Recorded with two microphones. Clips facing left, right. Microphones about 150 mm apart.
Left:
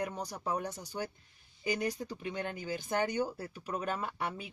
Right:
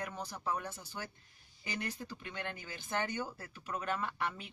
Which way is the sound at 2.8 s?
40° left (ahead or behind).